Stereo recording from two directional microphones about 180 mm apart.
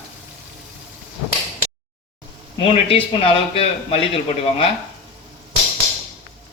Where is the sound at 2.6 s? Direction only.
30° left (ahead or behind).